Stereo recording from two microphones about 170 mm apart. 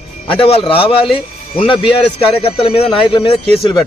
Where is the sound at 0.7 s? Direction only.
30° left (ahead or behind).